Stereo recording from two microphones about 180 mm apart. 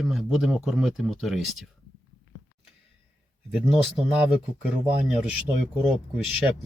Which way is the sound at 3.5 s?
5° right (ahead or behind).